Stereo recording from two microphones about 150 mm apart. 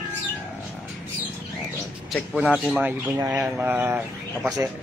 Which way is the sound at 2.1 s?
5° left (ahead or behind).